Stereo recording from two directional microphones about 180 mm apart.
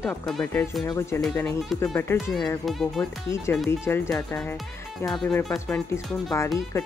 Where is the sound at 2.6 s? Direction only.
Centre (ahead or behind).